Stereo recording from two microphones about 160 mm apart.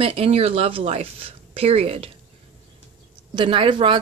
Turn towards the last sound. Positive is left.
turn(degrees=-30)  # may be behind; listen again after turning